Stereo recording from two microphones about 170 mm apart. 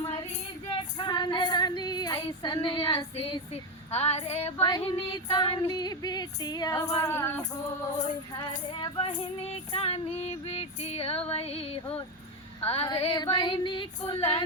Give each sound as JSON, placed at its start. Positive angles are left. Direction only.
{"t": 0.7, "sound": "female singing", "side_deg": 30}
{"t": 4.8, "sound": "female singing", "side_deg": 25}
{"t": 8.4, "sound": "music", "side_deg": 30}
{"t": 12.6, "sound": "female singing", "side_deg": 35}